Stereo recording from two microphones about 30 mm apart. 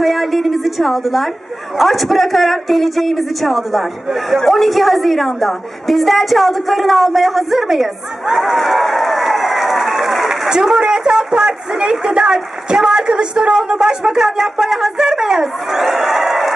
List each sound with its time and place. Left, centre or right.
0.0 s a woman's voice: centre
8.4 s a sound: centre
10.6 s a woman's voice: centre
15.3 s speech: centre